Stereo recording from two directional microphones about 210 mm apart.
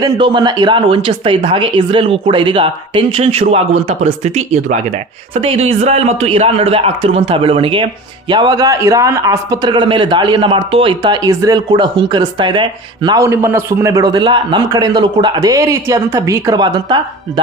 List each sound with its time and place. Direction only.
0.0 s a man's voice: 20° right (ahead or behind)